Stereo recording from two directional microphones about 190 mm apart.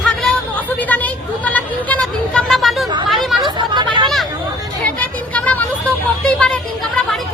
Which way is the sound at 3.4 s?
25° right (ahead or behind).